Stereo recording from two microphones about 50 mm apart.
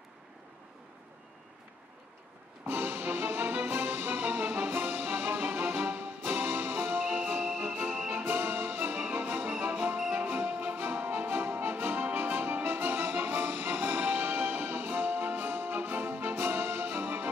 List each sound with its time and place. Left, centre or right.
2.6 s music: right